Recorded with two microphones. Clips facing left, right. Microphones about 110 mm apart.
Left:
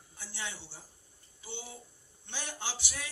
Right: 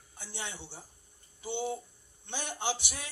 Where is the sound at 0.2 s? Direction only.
55° right (ahead or behind).